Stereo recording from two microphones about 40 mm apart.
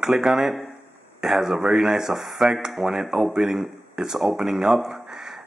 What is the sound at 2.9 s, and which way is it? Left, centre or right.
Speech, right.